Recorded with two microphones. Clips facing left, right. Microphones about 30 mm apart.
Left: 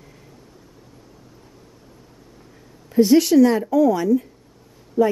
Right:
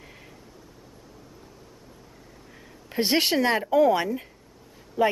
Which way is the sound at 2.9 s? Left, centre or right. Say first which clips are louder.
Left 9 dB; right.